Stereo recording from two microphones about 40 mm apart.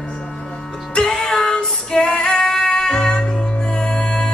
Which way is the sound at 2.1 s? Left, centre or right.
Left.